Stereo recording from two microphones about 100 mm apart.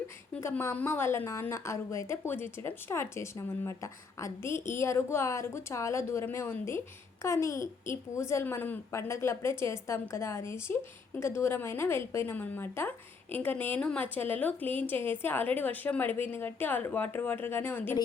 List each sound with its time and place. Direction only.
0.6 s speech: 25° left (ahead or behind)